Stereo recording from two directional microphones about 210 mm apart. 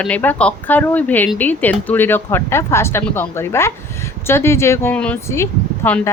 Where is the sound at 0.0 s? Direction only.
5° left (ahead or behind).